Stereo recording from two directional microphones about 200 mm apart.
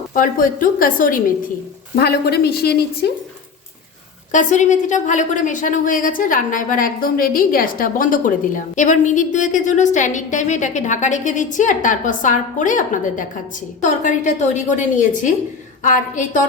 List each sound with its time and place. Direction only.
0.1 s a woman's voice: 45° left (ahead or behind)
4.3 s a woman's voice: 40° left (ahead or behind)